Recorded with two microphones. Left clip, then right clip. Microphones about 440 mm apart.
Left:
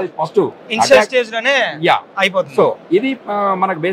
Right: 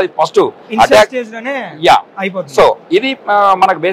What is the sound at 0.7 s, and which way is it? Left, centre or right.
Speech, left.